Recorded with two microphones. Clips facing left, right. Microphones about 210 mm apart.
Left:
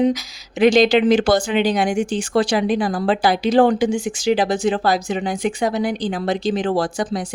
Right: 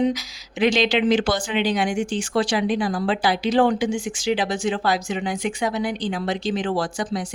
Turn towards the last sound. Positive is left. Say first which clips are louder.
# left 4 dB
turn(degrees=40)  # may be behind; listen again after turning